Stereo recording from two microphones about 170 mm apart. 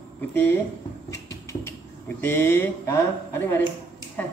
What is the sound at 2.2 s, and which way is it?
A man's voice, 10° left (ahead or behind).